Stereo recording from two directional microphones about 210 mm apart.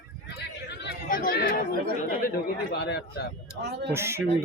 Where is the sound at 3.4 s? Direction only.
50° right (ahead or behind).